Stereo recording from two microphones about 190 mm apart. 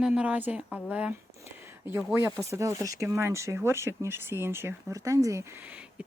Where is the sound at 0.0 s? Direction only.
5° right (ahead or behind).